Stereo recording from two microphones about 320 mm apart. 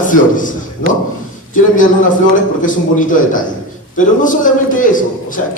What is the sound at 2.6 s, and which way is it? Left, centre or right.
A man's voice, left.